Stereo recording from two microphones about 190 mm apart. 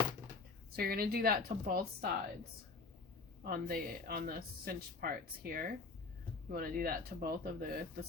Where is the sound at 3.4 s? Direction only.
50° right (ahead or behind).